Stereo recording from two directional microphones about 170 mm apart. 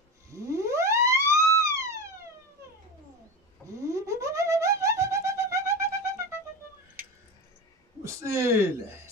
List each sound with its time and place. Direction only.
0.3 s theremin: 20° right (ahead or behind)
3.8 s music: 15° right (ahead or behind)
8.0 s a sound: 15° right (ahead or behind)